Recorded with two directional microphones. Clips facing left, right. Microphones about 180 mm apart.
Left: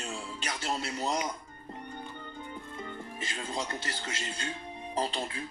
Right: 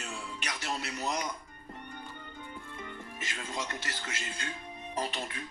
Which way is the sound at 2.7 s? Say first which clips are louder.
Left 4 dB; 30° left (ahead or behind).